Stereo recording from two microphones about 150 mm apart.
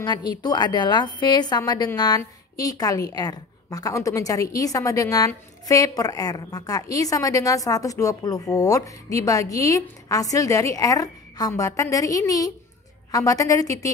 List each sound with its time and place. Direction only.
0.0 s a woman's voice: 30° left (ahead or behind)